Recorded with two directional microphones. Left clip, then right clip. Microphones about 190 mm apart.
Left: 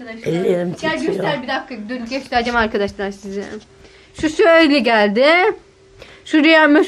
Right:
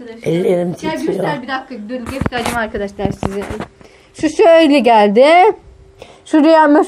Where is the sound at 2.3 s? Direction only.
40° left (ahead or behind).